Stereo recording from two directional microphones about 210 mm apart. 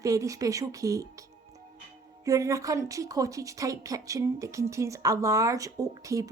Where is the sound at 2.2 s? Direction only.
15° right (ahead or behind).